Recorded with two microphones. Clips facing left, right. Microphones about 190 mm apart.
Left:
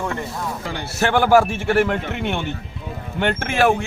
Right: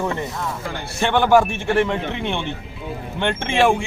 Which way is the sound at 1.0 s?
10° left (ahead or behind).